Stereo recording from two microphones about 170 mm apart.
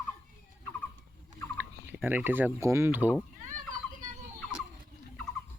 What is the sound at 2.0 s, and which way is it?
Speech, 10° right (ahead or behind).